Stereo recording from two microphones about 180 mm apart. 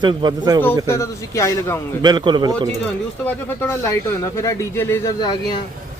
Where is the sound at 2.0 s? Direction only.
25° right (ahead or behind).